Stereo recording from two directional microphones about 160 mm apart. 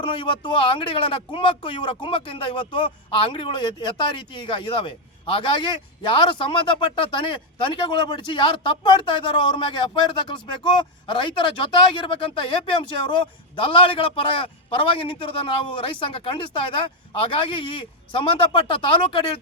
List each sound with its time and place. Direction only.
0.0 s speech: 30° left (ahead or behind)